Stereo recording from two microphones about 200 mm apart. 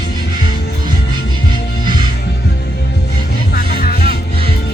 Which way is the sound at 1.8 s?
20° right (ahead or behind).